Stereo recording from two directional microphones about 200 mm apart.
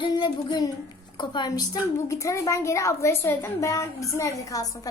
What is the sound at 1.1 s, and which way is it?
A woman's voice, 25° left (ahead or behind).